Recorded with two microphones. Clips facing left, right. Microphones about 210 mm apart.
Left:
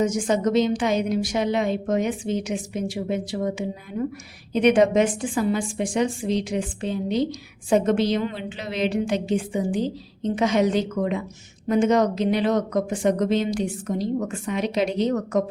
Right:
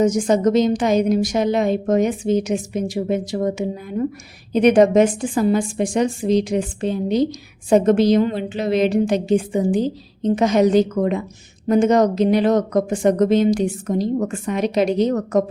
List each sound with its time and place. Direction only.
0.0 s a woman's voice: 40° right (ahead or behind)